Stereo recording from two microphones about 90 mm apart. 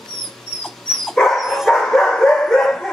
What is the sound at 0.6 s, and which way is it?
Dog, 5° left (ahead or behind).